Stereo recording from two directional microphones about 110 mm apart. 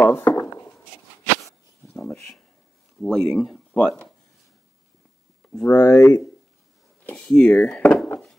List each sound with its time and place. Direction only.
0.0 s a sound: 20° left (ahead or behind)
2.0 s a sound: 5° left (ahead or behind)
3.0 s speech: 5° left (ahead or behind)
5.5 s speech: 10° left (ahead or behind)
5.9 s speech: 25° left (ahead or behind)
7.2 s speech: 5° left (ahead or behind)